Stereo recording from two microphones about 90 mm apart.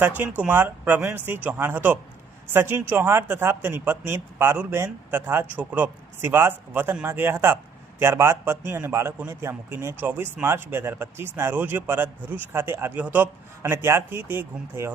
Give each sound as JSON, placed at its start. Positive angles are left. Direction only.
{"t": 0.0, "sound": "speech", "side_deg": -20}
{"t": 13.6, "sound": "speech", "side_deg": -30}